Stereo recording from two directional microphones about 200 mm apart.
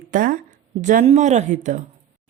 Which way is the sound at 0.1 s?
40° right (ahead or behind).